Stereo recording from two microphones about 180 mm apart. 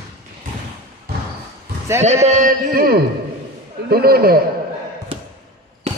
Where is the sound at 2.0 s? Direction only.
40° right (ahead or behind); by 4.4 s 55° right (ahead or behind).